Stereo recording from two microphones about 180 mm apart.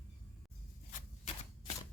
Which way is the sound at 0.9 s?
45° left (ahead or behind).